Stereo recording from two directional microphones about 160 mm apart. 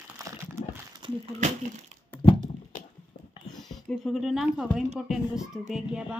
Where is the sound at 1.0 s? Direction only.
30° right (ahead or behind).